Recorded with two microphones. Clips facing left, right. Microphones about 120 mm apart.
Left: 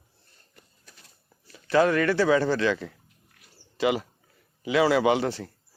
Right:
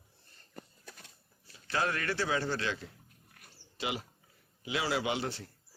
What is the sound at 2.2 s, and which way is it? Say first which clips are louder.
Speech: left 11 dB; 90° left.